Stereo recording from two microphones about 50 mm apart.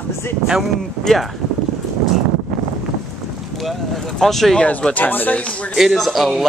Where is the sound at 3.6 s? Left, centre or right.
Centre.